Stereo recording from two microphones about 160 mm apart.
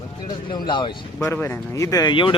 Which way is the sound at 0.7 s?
30° left (ahead or behind).